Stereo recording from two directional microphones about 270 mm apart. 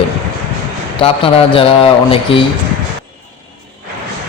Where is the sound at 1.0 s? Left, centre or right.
Centre.